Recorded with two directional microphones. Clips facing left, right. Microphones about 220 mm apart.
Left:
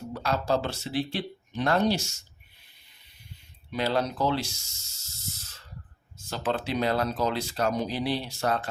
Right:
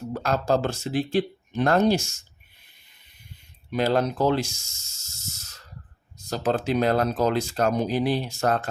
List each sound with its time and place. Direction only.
0.1 s speech: 45° right (ahead or behind)
3.7 s speech: 50° right (ahead or behind)
4.9 s snake: 45° right (ahead or behind)
6.1 s speech: 40° right (ahead or behind)